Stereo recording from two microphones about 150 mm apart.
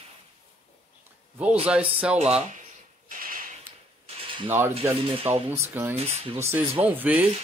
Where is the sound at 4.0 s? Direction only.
35° right (ahead or behind).